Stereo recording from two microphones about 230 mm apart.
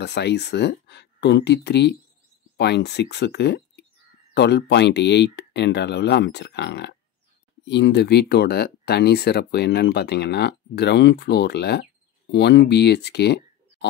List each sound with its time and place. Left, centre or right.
0.0 s speech: left